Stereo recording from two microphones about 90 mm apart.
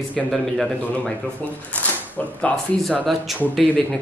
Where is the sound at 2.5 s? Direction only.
5° left (ahead or behind).